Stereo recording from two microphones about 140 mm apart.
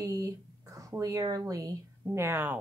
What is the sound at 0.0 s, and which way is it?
Speech, 25° right (ahead or behind).